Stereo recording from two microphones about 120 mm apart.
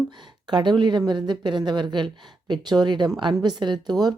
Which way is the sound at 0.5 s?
40° right (ahead or behind).